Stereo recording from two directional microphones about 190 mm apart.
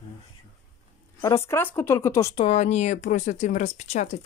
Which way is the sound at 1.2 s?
15° left (ahead or behind).